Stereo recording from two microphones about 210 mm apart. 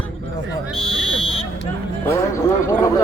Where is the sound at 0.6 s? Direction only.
Centre (ahead or behind).